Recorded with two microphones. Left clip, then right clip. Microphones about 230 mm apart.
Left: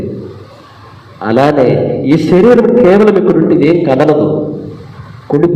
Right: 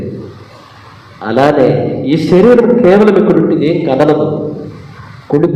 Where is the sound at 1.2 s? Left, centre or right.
Left.